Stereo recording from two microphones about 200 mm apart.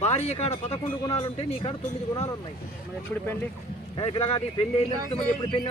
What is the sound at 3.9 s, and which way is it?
Speech, 25° left (ahead or behind).